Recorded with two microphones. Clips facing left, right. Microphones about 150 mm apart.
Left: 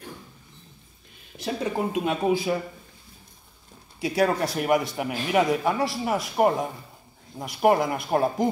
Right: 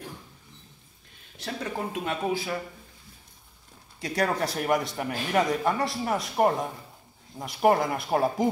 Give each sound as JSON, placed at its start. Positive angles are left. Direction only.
{"t": 1.4, "sound": "speech", "side_deg": 15}
{"t": 4.0, "sound": "a man's voice", "side_deg": 5}